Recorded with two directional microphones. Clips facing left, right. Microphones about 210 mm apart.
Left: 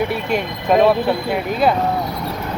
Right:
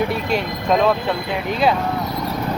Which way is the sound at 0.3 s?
5° left (ahead or behind).